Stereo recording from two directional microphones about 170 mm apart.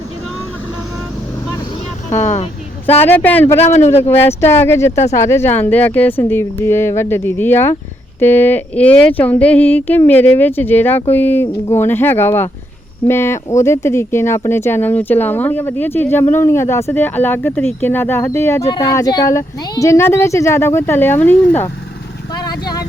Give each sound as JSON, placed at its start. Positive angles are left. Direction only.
{"t": 2.3, "sound": "speech", "side_deg": 40}
{"t": 3.0, "sound": "speech", "side_deg": 10}
{"t": 22.4, "sound": "speech", "side_deg": 25}